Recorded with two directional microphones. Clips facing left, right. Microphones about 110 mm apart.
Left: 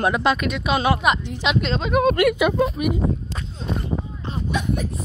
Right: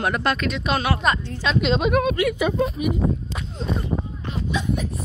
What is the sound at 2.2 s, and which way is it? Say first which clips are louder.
Speech: left 3 dB; 70° left (ahead or behind).